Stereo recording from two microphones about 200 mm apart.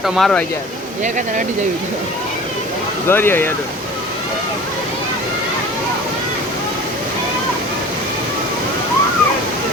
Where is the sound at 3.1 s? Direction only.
10° left (ahead or behind).